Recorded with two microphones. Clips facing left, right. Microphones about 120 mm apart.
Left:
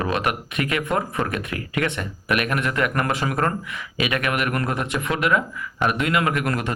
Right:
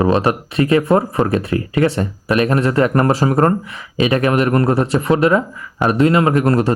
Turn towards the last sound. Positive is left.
turn(degrees=-35)  # may be behind; listen again after turning